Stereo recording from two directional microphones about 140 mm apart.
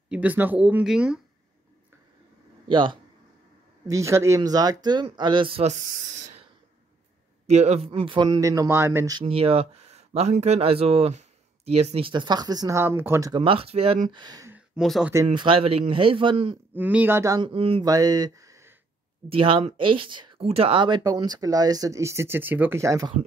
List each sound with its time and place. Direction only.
0.1 s speech: 10° right (ahead or behind)
2.7 s speech: 35° right (ahead or behind)
3.8 s speech: 20° right (ahead or behind)
7.4 s speech: 50° right (ahead or behind); by 9.2 s 20° right (ahead or behind)
9.2 s speech: 45° right (ahead or behind); by 13.3 s 15° right (ahead or behind)
13.3 s speech: 40° right (ahead or behind)
14.1 s speech: 30° right (ahead or behind)
14.8 s speech: 5° right (ahead or behind)
15.3 s speech: 40° right (ahead or behind)
16.7 s speech: 10° right (ahead or behind)
17.4 s speech: 40° right (ahead or behind)
17.8 s speech: 25° right (ahead or behind)
19.2 s speech: 40° right (ahead or behind); by 23.1 s 25° right (ahead or behind)